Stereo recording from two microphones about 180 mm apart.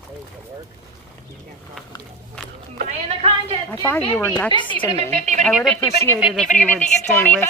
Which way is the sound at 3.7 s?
10° left (ahead or behind).